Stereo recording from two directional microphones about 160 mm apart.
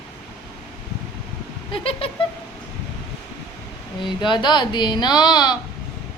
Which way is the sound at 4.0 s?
30° left (ahead or behind).